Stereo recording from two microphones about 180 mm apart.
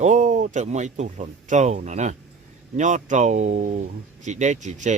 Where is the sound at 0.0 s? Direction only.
40° right (ahead or behind).